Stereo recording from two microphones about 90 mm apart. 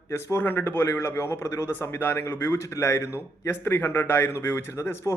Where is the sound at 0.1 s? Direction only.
25° left (ahead or behind).